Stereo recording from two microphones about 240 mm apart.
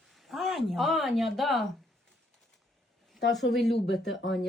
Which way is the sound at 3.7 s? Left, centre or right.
Left.